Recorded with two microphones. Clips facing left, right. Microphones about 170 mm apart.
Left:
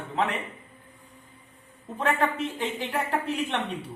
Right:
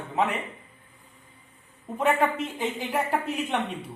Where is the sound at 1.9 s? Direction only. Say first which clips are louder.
Right 3 dB; 10° right (ahead or behind).